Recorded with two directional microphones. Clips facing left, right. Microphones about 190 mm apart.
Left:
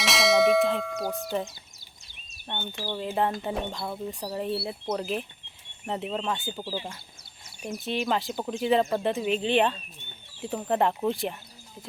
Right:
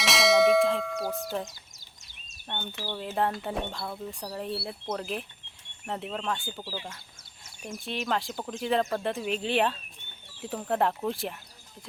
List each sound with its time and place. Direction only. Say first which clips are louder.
0.0 s clang: even; centre (ahead or behind)
2.5 s speech: left 2 dB; 10° left (ahead or behind)
3.1 s speech: left 1 dB; centre (ahead or behind); by 6.9 s 15° left (ahead or behind)
7.8 s speech: left 3 dB; centre (ahead or behind)